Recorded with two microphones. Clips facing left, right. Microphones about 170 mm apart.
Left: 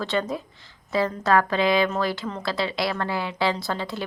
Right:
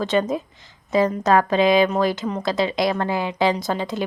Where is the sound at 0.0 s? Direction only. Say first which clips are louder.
Right 5 dB; 20° right (ahead or behind).